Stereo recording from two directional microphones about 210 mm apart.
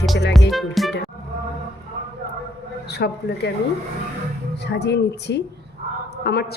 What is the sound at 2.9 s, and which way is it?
Speech, 50° left (ahead or behind).